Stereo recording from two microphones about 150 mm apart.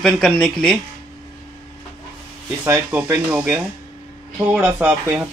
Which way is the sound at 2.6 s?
15° right (ahead or behind).